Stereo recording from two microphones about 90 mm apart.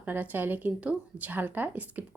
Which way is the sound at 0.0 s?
20° right (ahead or behind).